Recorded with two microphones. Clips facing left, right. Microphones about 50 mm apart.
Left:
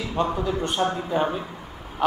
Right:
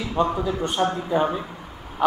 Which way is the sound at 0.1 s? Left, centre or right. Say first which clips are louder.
Right 2 dB; centre.